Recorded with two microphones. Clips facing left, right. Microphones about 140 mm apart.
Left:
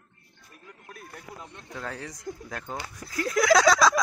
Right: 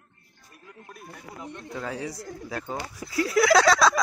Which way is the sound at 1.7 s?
5° right (ahead or behind).